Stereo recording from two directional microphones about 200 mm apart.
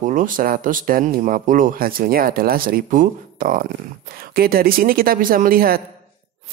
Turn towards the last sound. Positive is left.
turn(degrees=-45)  # may be behind; listen again after turning